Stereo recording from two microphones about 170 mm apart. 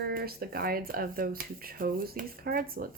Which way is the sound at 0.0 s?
65° right (ahead or behind).